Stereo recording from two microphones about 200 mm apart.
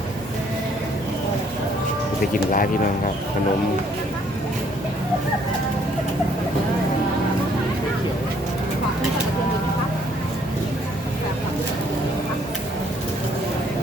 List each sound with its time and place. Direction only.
2.3 s speech: 45° left (ahead or behind)